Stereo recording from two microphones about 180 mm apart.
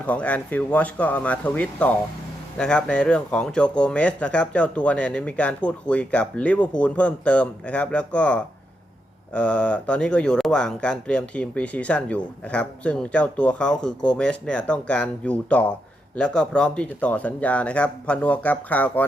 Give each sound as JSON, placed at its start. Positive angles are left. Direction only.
{"t": 0.0, "sound": "speech", "side_deg": 10}